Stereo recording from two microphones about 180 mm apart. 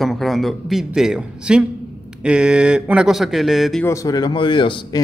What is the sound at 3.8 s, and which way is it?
Speech, 20° left (ahead or behind).